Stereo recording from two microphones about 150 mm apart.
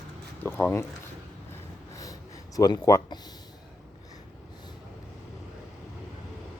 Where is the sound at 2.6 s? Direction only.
25° left (ahead or behind).